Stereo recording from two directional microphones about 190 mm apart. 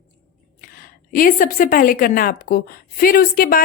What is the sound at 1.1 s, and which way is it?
A woman's voice, 45° left (ahead or behind).